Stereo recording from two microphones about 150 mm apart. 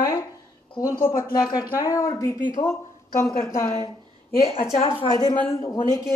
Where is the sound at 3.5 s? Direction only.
20° left (ahead or behind).